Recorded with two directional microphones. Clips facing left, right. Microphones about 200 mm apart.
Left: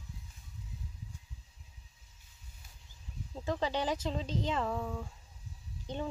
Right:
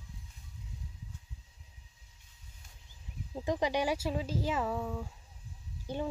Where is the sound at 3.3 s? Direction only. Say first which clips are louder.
Right 3 dB; 15° right (ahead or behind).